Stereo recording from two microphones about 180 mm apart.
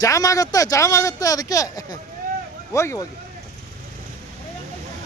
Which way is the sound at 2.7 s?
15° left (ahead or behind).